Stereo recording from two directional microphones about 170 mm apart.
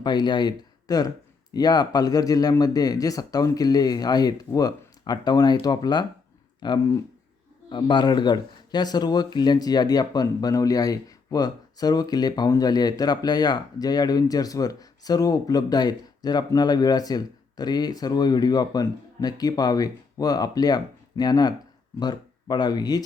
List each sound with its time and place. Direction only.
0.0 s speech: 25° left (ahead or behind)